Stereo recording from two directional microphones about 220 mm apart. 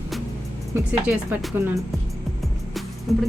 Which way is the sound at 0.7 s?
5° right (ahead or behind).